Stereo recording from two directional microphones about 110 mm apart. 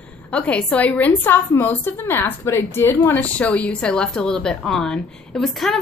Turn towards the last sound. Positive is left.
turn(degrees=0)  # may be behind; listen again after turning